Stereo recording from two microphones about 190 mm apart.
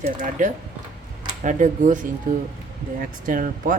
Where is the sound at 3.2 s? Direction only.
45° right (ahead or behind).